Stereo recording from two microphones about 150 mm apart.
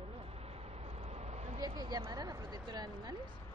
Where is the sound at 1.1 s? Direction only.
45° right (ahead or behind).